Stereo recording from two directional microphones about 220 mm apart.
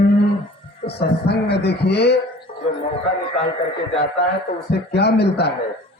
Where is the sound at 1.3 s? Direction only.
50° left (ahead or behind).